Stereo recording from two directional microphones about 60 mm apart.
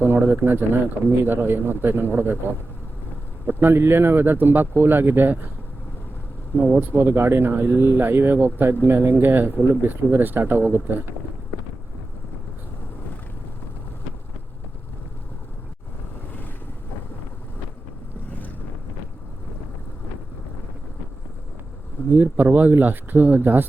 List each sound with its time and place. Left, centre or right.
0.0 s speech: right
6.7 s speech: right
22.1 s speech: right